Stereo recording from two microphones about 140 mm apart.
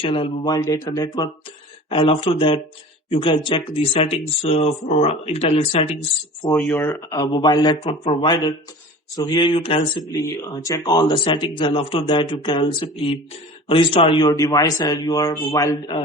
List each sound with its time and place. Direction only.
0.0 s speech: 40° left (ahead or behind)
1.9 s speech: 40° left (ahead or behind)
6.6 s speech: 10° left (ahead or behind)
7.1 s speech: 30° left (ahead or behind)
10.1 s speech: 20° left (ahead or behind); by 14.3 s 40° left (ahead or behind)
14.3 s speech: 25° left (ahead or behind)